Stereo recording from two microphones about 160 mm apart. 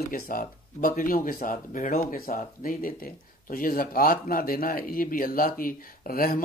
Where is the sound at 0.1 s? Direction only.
60° left (ahead or behind).